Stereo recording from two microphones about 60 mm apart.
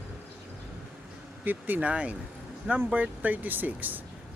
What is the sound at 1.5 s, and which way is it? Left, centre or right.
Speech, right.